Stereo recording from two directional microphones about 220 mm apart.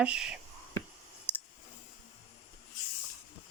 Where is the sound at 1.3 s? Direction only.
5° right (ahead or behind).